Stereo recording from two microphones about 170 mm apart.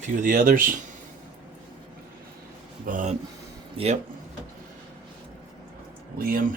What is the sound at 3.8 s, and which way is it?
Speech, 35° right (ahead or behind).